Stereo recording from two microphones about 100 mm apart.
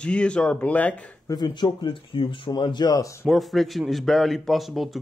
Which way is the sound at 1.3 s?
45° left (ahead or behind).